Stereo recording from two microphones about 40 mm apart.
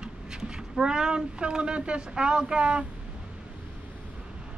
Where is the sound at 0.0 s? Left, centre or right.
Centre.